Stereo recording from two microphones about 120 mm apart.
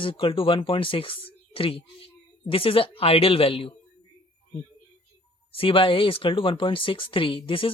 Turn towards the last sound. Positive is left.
turn(degrees=45)  # may be behind; listen again after turning